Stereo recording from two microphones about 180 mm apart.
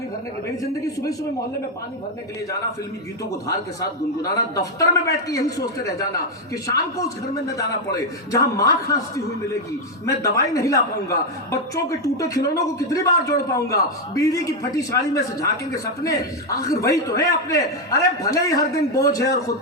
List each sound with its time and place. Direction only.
3.8 s a man's voice: 20° left (ahead or behind)